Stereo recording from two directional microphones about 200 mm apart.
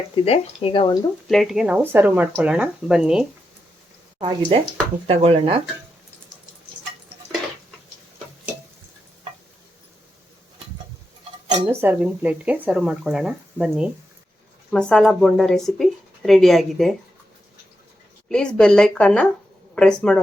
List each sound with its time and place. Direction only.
0.2 s speech: 30° left (ahead or behind)
1.3 s speech: centre (ahead or behind)
4.2 s speech: 25° right (ahead or behind)
11.7 s speech: 10° right (ahead or behind)
18.3 s speech: 5° left (ahead or behind)